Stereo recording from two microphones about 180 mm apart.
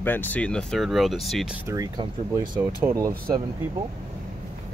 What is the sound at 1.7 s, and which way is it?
Speech, 20° right (ahead or behind).